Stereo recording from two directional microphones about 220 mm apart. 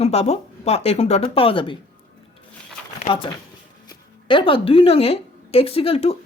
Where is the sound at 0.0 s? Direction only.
30° left (ahead or behind).